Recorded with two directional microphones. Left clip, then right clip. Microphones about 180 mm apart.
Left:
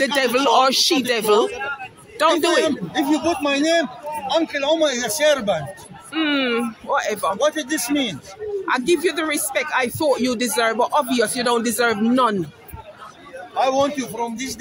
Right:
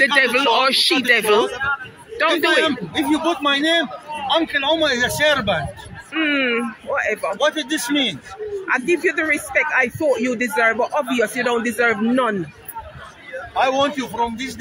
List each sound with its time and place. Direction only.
0.0 s a man's voice: 15° left (ahead or behind)
8.6 s speech: 5° left (ahead or behind)
13.6 s speech: 10° left (ahead or behind)